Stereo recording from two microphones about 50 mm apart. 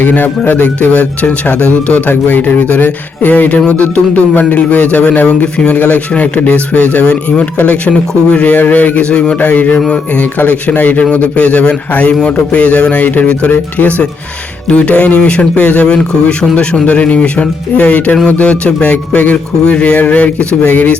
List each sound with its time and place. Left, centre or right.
0.0 s a man's voice: left
2.0 s a man's voice: left
9.0 s a man's voice: left
9.4 s a man's voice: left